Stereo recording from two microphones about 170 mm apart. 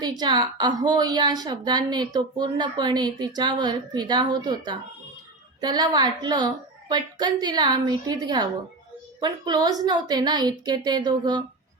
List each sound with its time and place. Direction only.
0.0 s a woman's voice: 25° right (ahead or behind)